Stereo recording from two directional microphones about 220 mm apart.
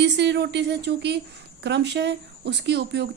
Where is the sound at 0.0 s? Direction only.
50° right (ahead or behind).